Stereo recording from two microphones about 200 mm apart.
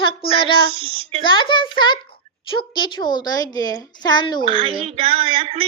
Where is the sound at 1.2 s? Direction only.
25° left (ahead or behind).